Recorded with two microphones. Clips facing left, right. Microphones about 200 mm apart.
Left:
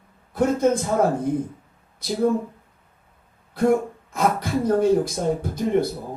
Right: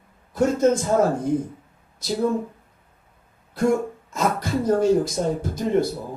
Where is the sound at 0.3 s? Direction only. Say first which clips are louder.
Right 1 dB; 55° left (ahead or behind).